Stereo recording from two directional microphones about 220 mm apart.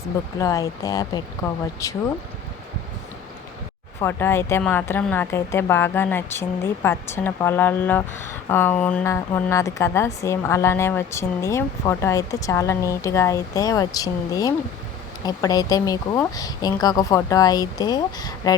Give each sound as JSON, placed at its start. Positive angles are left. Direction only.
{"t": 0.3, "sound": "a woman's voice", "side_deg": 15}
{"t": 4.0, "sound": "a woman's voice", "side_deg": 10}